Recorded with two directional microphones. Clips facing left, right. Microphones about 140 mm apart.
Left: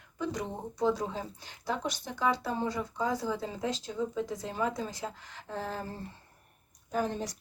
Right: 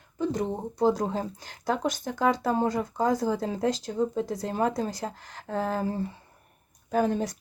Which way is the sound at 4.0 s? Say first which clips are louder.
Right 5 dB; 45° right (ahead or behind).